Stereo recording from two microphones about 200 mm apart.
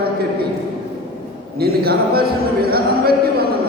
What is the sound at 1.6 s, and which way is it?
Speech, 50° right (ahead or behind).